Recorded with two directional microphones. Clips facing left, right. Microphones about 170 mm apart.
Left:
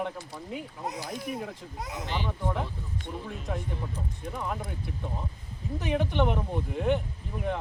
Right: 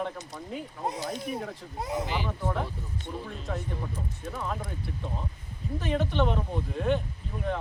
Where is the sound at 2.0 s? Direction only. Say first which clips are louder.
Right 1 dB; 5° right (ahead or behind).